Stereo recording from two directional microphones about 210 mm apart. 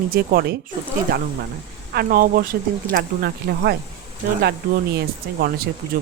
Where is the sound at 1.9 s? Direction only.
45° right (ahead or behind).